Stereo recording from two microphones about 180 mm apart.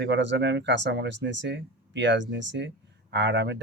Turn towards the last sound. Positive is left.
turn(degrees=-75)  # may be behind; listen again after turning